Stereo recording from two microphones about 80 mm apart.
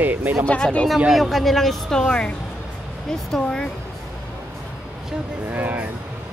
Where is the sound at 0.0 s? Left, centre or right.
Right.